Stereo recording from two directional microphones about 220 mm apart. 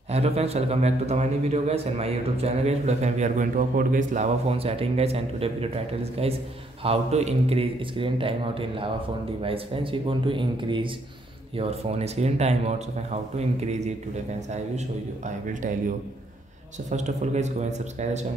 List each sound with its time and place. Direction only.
0.1 s a man's voice: 30° right (ahead or behind)
15.2 s speech: 35° right (ahead or behind)
16.9 s speech: 30° right (ahead or behind)